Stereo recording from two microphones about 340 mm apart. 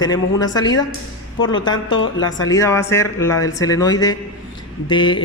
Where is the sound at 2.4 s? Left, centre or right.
Centre.